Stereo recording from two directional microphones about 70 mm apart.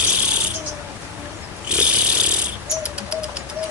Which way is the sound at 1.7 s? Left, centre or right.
Centre.